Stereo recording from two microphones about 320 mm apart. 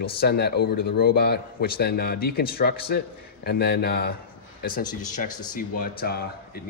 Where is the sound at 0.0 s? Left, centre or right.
Left.